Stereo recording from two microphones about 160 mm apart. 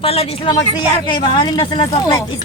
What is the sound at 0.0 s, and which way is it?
Speech, 40° left (ahead or behind).